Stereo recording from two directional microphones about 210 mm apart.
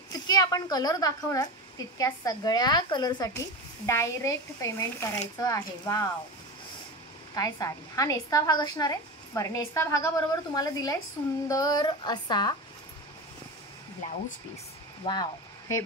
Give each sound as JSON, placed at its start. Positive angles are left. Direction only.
{"t": 0.1, "sound": "a woman's voice", "side_deg": 20}
{"t": 7.3, "sound": "speech", "side_deg": 15}
{"t": 15.0, "sound": "speech", "side_deg": 25}